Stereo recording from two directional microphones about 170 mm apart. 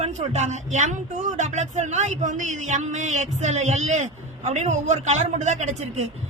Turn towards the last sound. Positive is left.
turn(degrees=-40)  # may be behind; listen again after turning